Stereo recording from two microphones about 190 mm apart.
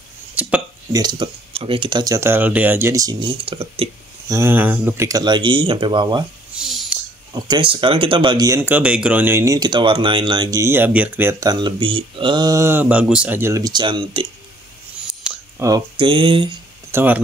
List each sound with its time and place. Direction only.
0.3 s hiccup: 10° right (ahead or behind)
0.9 s speech: 25° right (ahead or behind)
4.3 s speech: 15° right (ahead or behind)
6.5 s a sound: centre (ahead or behind)
7.3 s speech: 25° right (ahead or behind)
15.2 s a sound: 5° right (ahead or behind)
15.6 s speech: 20° right (ahead or behind)
16.9 s speech: 10° right (ahead or behind)